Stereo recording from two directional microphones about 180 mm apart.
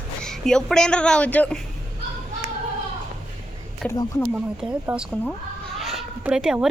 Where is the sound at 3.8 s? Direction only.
Centre (ahead or behind).